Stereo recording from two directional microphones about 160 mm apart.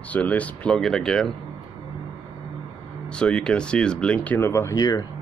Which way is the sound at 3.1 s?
5° left (ahead or behind).